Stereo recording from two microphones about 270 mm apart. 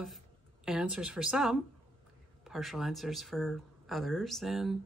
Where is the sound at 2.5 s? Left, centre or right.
Centre.